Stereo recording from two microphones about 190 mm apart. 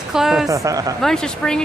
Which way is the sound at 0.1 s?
Centre (ahead or behind).